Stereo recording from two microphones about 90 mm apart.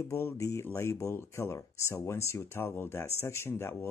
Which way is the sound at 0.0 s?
30° left (ahead or behind).